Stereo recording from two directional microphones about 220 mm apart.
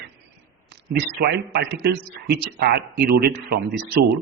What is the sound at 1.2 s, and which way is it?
Speech, 50° right (ahead or behind).